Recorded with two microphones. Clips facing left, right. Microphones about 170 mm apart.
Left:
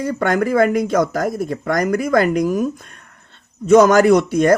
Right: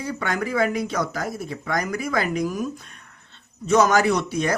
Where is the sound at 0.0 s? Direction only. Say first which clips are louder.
Left 8 dB; 50° left (ahead or behind).